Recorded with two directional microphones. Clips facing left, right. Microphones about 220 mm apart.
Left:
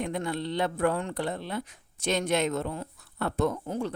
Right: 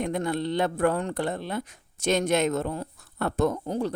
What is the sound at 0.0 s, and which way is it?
A man's voice, 45° right (ahead or behind).